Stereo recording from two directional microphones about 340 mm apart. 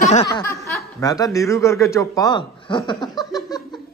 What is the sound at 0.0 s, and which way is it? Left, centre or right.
Speech, centre.